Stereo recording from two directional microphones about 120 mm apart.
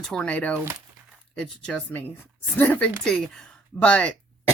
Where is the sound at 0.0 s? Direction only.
5° left (ahead or behind).